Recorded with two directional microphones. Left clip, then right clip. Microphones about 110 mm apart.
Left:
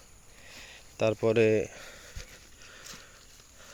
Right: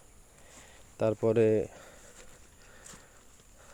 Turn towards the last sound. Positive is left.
turn(degrees=-5)  # may be behind; listen again after turning